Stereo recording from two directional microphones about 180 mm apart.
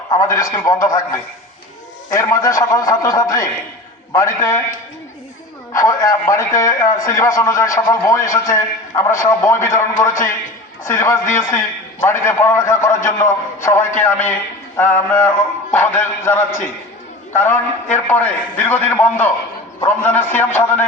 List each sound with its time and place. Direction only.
0.1 s a man's voice: 20° left (ahead or behind)
2.1 s a man's voice: 20° left (ahead or behind)
5.7 s a man's voice: 20° left (ahead or behind)